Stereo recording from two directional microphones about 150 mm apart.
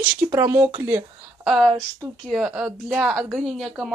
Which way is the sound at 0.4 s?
15° right (ahead or behind).